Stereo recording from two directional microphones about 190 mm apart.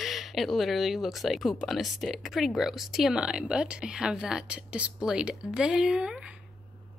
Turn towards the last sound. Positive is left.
turn(degrees=-5)  # may be behind; listen again after turning